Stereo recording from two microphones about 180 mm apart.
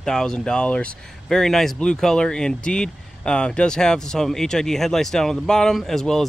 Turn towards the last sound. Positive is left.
turn(degrees=0)  # may be behind; listen again after turning